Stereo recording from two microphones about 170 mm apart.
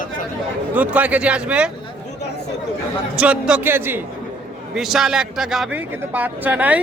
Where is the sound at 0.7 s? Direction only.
10° right (ahead or behind).